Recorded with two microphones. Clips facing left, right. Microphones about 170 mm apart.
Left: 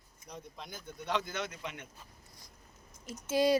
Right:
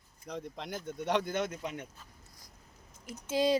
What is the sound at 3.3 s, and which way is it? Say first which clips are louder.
Speech: left 1 dB; 15° right (ahead or behind).